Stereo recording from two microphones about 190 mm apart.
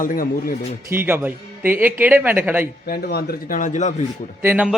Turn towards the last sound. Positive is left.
turn(degrees=-10)  # may be behind; listen again after turning